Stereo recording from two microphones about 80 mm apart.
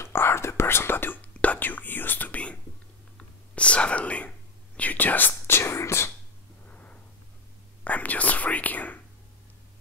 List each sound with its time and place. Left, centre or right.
0.0 s whispering: left
6.7 s a sound: centre
7.8 s whispering: centre